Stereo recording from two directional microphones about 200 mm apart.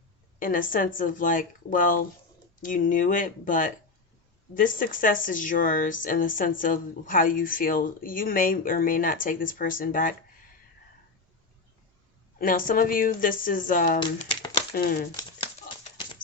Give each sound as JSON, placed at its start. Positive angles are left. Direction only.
{"t": 0.3, "sound": "speech", "side_deg": 45}
{"t": 12.4, "sound": "speech", "side_deg": 45}
{"t": 14.0, "sound": "speech", "side_deg": 25}
{"t": 14.8, "sound": "speech", "side_deg": 50}